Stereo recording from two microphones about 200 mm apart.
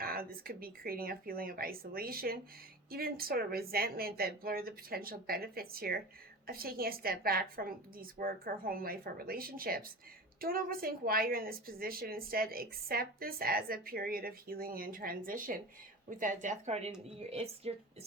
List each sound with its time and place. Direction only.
0.0 s a woman's voice: 50° right (ahead or behind); by 17.7 s 30° right (ahead or behind)